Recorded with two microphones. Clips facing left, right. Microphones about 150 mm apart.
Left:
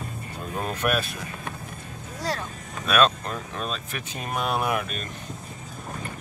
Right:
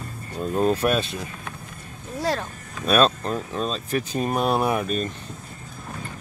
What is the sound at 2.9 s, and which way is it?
Speech, 35° right (ahead or behind).